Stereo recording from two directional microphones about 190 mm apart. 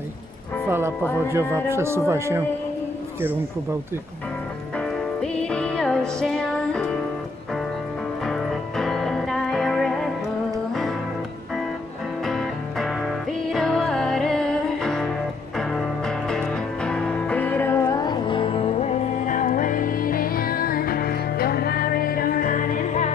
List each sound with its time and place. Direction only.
0.7 s music: 10° right (ahead or behind)
1.7 s speech: 15° right (ahead or behind)
4.7 s music: 5° left (ahead or behind)
8.3 s music: centre (ahead or behind)
12.3 s music: centre (ahead or behind); by 23.1 s 40° left (ahead or behind)